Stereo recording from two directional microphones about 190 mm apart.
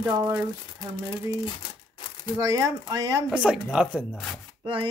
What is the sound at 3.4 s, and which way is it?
Speech, centre (ahead or behind).